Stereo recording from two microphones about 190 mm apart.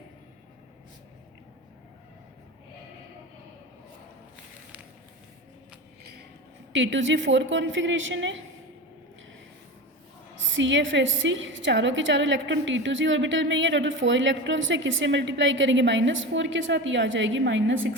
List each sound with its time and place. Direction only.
6.7 s a woman's voice: 75° right (ahead or behind)
10.3 s a woman's voice: 85° right